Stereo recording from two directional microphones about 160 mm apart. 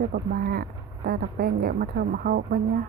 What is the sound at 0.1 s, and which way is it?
Speech, 70° right (ahead or behind).